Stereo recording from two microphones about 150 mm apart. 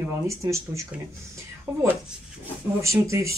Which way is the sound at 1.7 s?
10° right (ahead or behind).